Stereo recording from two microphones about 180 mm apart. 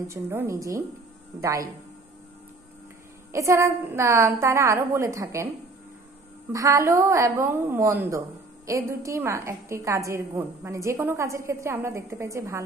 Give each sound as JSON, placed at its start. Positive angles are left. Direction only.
{"t": 0.0, "sound": "a woman's voice", "side_deg": -15}
{"t": 3.3, "sound": "a woman's voice", "side_deg": -15}
{"t": 6.5, "sound": "a woman's voice", "side_deg": -15}